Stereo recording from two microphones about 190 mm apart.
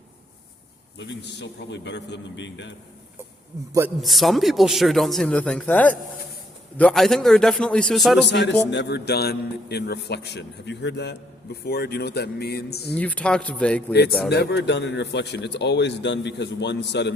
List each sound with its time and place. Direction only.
0.9 s a man's voice: 65° left (ahead or behind)
4.0 s speech: centre (ahead or behind)
8.3 s a man's voice: 65° left (ahead or behind)
12.9 s a man's voice: 10° left (ahead or behind)
14.3 s a man's voice: 60° left (ahead or behind)